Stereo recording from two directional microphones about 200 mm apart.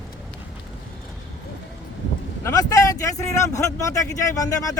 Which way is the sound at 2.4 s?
15° left (ahead or behind).